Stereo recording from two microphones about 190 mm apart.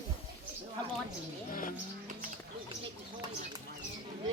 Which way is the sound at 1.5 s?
45° left (ahead or behind).